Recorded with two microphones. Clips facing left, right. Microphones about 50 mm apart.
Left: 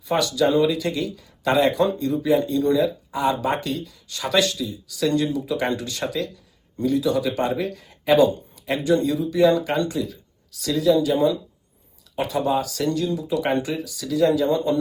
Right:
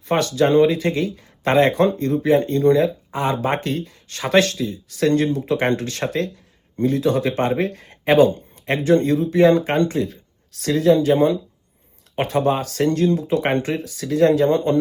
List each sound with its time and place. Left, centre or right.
0.0 s speech: right